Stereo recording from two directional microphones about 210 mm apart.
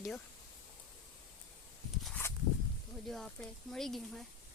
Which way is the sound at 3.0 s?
Centre (ahead or behind).